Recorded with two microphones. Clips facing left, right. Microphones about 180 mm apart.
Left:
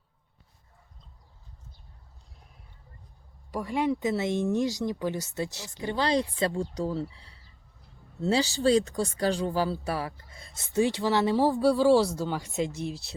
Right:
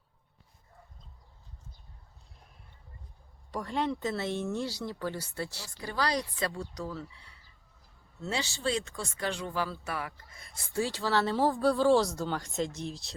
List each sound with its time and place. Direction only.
3.5 s speech: 10° left (ahead or behind)